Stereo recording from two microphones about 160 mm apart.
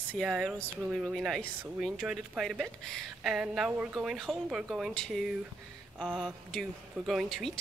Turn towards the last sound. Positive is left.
turn(degrees=0)  # may be behind; listen again after turning